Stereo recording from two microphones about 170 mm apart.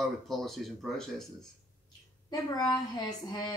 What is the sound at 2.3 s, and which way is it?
A woman's voice, 20° left (ahead or behind).